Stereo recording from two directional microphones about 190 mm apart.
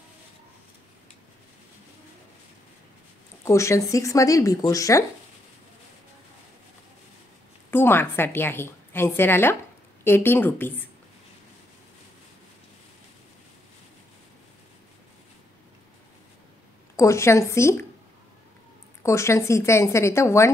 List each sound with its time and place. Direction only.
3.4 s a woman's voice: 15° left (ahead or behind)
7.7 s a woman's voice: 10° left (ahead or behind)
16.9 s a woman's voice: 15° left (ahead or behind)
19.0 s a woman's voice: 15° left (ahead or behind)